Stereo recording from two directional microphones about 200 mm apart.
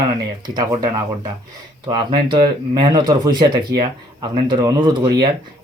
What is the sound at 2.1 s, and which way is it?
Speech, 25° right (ahead or behind).